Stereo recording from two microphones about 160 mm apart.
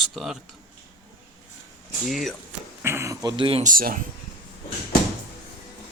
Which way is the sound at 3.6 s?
60° right (ahead or behind).